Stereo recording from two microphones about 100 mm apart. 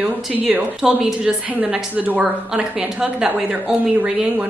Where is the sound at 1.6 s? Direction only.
15° right (ahead or behind).